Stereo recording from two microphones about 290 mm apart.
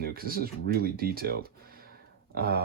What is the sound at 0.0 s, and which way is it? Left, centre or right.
Speech, right.